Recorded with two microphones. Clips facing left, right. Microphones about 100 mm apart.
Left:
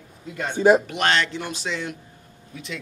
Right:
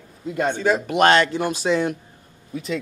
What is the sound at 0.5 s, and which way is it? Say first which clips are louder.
Speech: left 8 dB; 20° left (ahead or behind).